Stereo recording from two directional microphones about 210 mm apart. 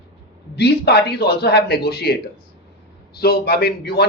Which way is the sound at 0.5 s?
50° left (ahead or behind).